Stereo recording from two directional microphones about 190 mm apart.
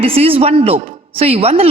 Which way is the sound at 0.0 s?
30° right (ahead or behind).